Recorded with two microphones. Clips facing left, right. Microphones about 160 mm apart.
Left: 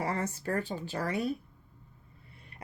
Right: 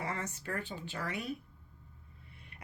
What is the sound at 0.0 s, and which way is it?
Speech, 35° left (ahead or behind).